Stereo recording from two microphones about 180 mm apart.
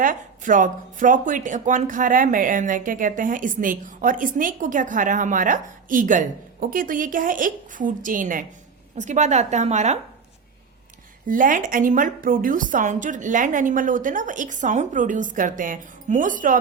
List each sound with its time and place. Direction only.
0.0 s a woman's voice: 45° right (ahead or behind)
11.3 s speech: 50° right (ahead or behind)